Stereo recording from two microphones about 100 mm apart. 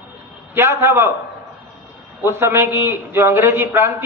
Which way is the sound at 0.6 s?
25° right (ahead or behind).